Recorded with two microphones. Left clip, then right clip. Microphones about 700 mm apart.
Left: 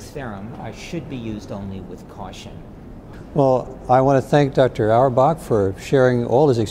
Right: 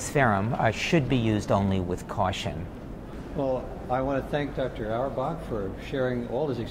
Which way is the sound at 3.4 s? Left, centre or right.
Left.